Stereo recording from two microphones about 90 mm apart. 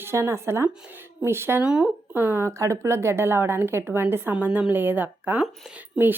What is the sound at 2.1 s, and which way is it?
A woman's voice, 25° right (ahead or behind).